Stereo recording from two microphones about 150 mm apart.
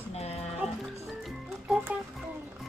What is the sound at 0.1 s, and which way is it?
Music, 45° left (ahead or behind).